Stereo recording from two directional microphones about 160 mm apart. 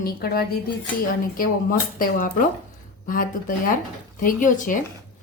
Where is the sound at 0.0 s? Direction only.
70° left (ahead or behind).